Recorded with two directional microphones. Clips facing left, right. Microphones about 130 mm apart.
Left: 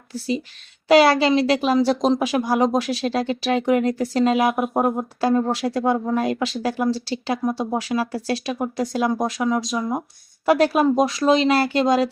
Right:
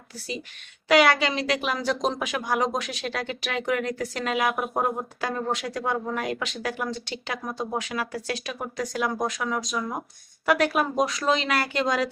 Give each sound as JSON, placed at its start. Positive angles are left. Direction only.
{"t": 0.1, "sound": "speech", "side_deg": 30}